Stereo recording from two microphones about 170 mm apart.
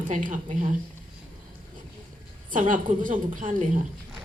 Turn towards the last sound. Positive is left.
turn(degrees=-50)  # may be behind; listen again after turning